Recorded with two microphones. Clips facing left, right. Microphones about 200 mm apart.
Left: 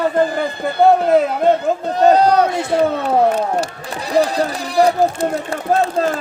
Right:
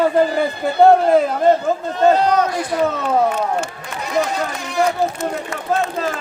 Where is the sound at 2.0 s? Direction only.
35° left (ahead or behind).